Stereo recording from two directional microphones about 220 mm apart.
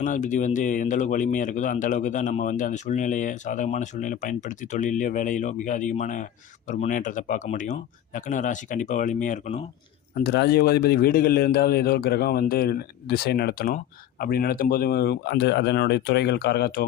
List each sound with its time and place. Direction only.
0.0 s speech: 35° left (ahead or behind)
10.2 s a man's voice: 45° left (ahead or behind)